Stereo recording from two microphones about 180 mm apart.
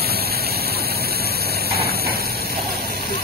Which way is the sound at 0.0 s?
60° right (ahead or behind).